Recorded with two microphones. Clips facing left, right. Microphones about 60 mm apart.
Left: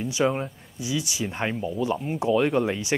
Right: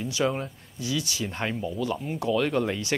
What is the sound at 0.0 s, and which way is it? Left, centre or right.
Speech, centre.